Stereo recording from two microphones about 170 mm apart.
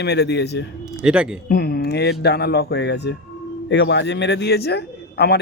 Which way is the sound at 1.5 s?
70° left (ahead or behind).